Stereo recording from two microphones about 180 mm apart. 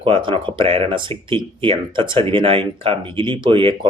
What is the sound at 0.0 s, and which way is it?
Speech, 30° right (ahead or behind).